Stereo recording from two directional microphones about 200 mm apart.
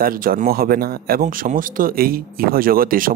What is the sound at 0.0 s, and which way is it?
Speech, 45° right (ahead or behind).